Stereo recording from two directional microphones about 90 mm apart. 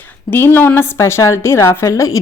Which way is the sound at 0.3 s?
25° left (ahead or behind).